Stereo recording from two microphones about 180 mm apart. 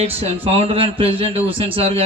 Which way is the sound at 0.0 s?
35° right (ahead or behind).